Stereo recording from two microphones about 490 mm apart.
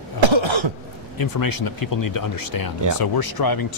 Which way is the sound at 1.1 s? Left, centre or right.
Left.